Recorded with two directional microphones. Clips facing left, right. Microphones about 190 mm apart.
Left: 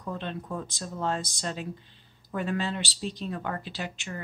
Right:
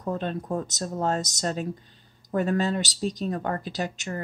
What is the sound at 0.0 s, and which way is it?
Speech, 45° right (ahead or behind).